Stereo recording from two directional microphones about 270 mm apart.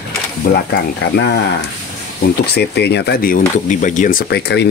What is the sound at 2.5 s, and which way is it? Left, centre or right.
Speech, left.